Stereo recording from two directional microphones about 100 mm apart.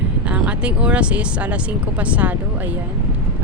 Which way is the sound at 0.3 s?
10° right (ahead or behind).